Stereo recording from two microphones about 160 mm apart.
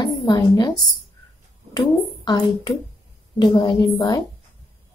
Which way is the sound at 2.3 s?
25° left (ahead or behind).